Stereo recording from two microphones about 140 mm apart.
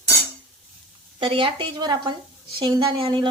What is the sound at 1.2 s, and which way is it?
A woman's voice, 40° right (ahead or behind).